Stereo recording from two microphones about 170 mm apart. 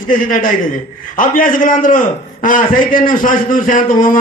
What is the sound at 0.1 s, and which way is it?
A man's voice, 55° left (ahead or behind).